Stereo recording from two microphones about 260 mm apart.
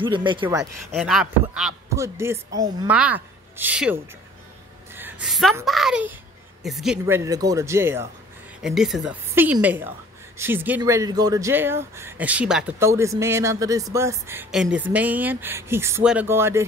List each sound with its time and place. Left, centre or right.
0.0 s a woman's voice: centre
0.9 s a woman's voice: centre
4.9 s a sound: centre
5.7 s a child's voice: centre